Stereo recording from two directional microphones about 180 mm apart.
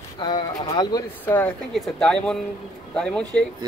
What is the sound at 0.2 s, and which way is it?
Speech, 25° left (ahead or behind).